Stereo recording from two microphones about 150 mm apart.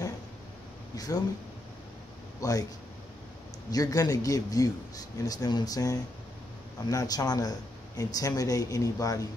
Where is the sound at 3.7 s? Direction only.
25° left (ahead or behind).